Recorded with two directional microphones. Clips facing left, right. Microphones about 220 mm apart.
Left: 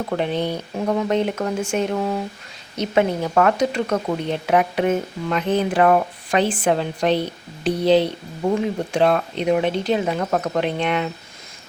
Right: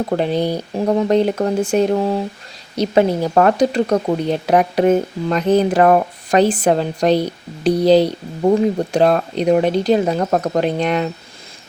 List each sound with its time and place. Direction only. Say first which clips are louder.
0.1 s speech: right 3 dB; 35° right (ahead or behind)